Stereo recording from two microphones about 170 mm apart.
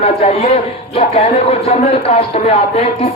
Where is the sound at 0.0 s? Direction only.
40° left (ahead or behind).